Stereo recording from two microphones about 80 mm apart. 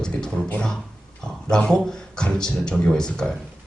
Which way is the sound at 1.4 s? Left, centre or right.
Centre.